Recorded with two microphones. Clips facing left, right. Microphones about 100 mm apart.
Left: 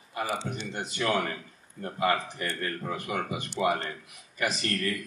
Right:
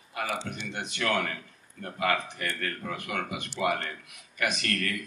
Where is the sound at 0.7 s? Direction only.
70° right (ahead or behind).